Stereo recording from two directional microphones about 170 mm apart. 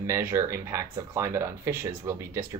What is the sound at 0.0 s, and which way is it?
Speech, 15° right (ahead or behind).